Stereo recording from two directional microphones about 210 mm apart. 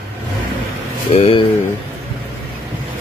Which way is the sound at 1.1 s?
25° left (ahead or behind).